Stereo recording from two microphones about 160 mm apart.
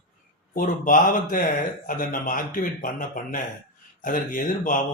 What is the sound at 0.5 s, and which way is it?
A man's voice, 60° left (ahead or behind).